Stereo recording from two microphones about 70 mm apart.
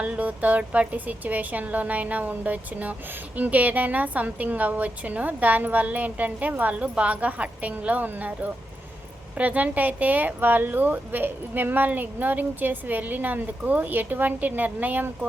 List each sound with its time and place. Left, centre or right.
0.0 s a woman's voice: centre